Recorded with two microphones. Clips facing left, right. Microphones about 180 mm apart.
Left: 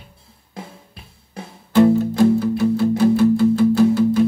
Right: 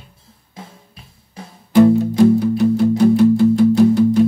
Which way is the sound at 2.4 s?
15° right (ahead or behind).